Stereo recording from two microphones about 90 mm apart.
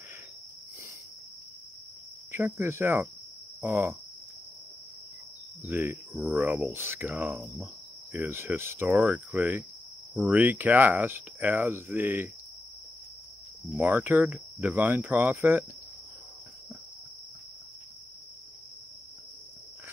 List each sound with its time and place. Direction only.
2.3 s speech: 30° right (ahead or behind)
5.7 s speech: 25° right (ahead or behind)
6.1 s speech: 10° right (ahead or behind)
13.7 s speech: 20° right (ahead or behind)